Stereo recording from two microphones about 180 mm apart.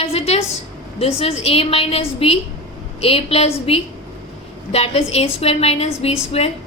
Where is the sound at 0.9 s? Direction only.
35° left (ahead or behind).